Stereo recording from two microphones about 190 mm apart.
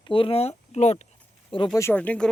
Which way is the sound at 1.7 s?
10° left (ahead or behind).